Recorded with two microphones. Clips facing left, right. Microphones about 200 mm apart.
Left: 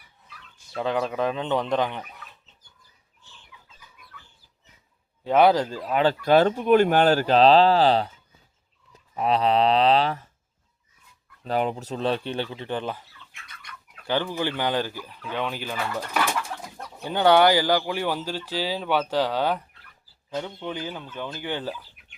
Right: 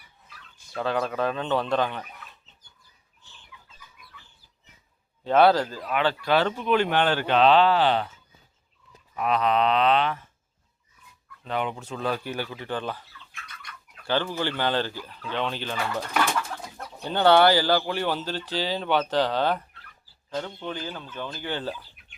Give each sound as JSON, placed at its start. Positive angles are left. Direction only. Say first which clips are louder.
{"t": 0.7, "sound": "speech", "louder": "left 1 dB", "side_deg": 15}
{"t": 5.2, "sound": "speech", "louder": "left 1 dB", "side_deg": 15}
{"t": 5.9, "sound": "speech", "louder": "left 5 dB", "side_deg": 40}
{"t": 9.1, "sound": "speech", "louder": "left 2 dB", "side_deg": 30}
{"t": 11.4, "sound": "speech", "louder": "left 4 dB", "side_deg": 40}
{"t": 17.0, "sound": "speech", "louder": "even", "side_deg": 10}